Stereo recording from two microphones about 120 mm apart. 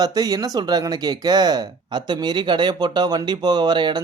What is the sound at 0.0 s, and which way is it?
Speech, 35° right (ahead or behind).